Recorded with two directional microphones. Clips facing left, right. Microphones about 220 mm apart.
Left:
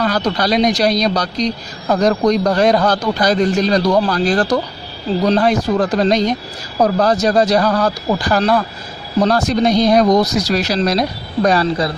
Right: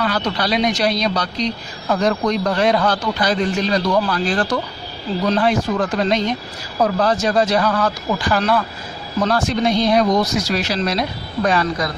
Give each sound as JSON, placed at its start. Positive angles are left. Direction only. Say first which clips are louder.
{"t": 0.0, "sound": "speech", "louder": "left 4 dB", "side_deg": 40}